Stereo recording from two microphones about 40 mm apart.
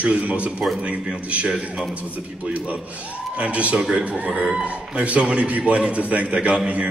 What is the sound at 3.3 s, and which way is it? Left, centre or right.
A man's voice, right.